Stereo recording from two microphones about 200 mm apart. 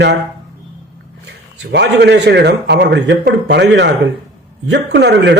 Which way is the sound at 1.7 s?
60° right (ahead or behind).